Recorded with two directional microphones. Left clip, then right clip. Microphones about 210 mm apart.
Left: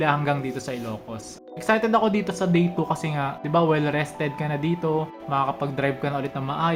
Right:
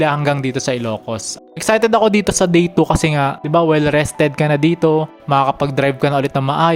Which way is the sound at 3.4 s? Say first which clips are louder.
Right 6 dB; 40° right (ahead or behind).